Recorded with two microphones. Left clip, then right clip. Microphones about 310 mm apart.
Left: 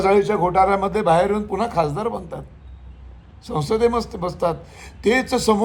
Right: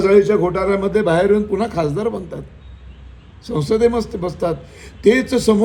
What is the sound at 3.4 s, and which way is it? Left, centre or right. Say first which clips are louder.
A man's voice: right 3 dB; centre.